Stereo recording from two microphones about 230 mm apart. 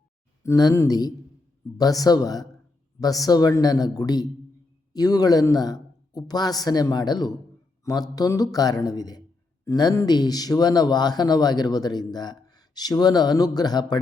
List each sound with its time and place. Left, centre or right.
0.4 s speech: centre